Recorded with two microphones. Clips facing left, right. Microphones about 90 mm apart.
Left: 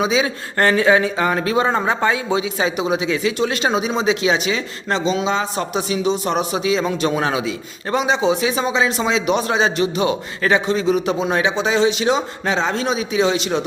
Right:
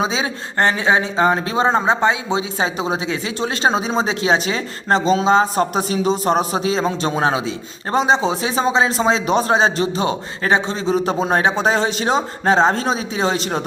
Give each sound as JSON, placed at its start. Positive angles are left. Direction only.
{"t": 0.0, "sound": "a man's voice", "side_deg": -30}